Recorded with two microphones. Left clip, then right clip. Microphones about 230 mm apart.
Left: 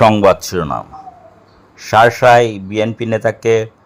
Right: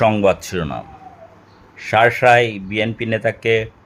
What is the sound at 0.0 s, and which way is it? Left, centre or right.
A man's voice, left.